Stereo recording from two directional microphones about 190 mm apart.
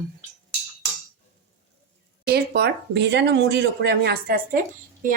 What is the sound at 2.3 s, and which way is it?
Speech, 60° right (ahead or behind).